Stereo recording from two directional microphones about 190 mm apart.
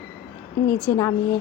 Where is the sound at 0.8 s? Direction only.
15° left (ahead or behind).